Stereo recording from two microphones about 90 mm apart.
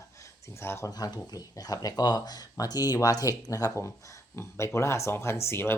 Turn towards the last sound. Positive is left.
turn(degrees=30)  # may be behind; listen again after turning